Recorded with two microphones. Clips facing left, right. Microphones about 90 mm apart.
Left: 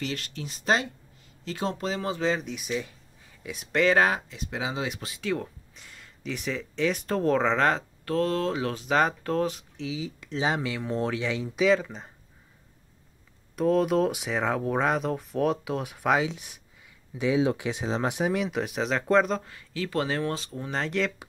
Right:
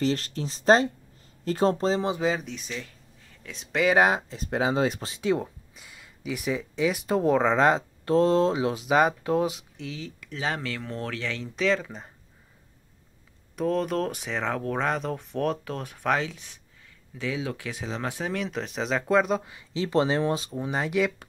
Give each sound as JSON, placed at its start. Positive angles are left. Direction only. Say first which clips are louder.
{"t": 0.0, "sound": "speech", "louder": "right 7 dB", "side_deg": -35}
{"t": 2.1, "sound": "speech", "louder": "right 1 dB", "side_deg": -5}
{"t": 2.5, "sound": "speech", "louder": "left 5 dB", "side_deg": 10}
{"t": 3.8, "sound": "speech", "louder": "right 1 dB", "side_deg": -15}
{"t": 4.3, "sound": "speech", "louder": "right 6 dB", "side_deg": -40}
{"t": 5.8, "sound": "speech", "louder": "even", "side_deg": -5}
{"t": 10.2, "sound": "speech", "louder": "left 3 dB", "side_deg": 20}
{"t": 13.6, "sound": "speech", "louder": "left 3 dB", "side_deg": 0}